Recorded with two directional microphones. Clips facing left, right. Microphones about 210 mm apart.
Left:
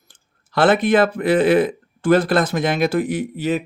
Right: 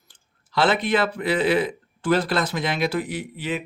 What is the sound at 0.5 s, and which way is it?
Speech, 50° left (ahead or behind).